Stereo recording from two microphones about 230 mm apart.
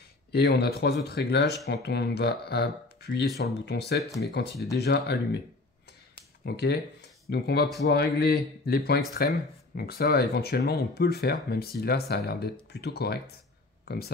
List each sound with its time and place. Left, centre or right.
0.3 s speech: left
6.4 s speech: left